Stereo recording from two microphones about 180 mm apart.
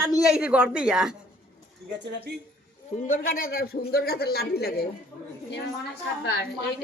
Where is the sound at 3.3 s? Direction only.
55° left (ahead or behind).